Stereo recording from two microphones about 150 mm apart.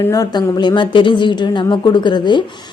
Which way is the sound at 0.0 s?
25° left (ahead or behind).